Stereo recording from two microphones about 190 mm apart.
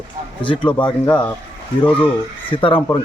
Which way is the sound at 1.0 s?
5° left (ahead or behind).